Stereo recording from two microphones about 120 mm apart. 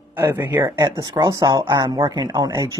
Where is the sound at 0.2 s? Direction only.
20° right (ahead or behind).